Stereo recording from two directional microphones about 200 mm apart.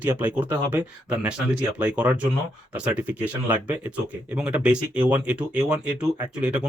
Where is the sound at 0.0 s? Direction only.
10° right (ahead or behind).